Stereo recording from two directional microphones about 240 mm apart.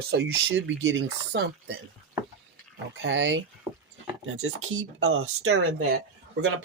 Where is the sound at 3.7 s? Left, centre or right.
Centre.